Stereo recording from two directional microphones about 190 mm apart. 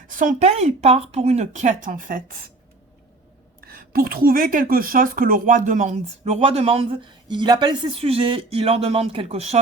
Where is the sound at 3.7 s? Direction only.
50° right (ahead or behind).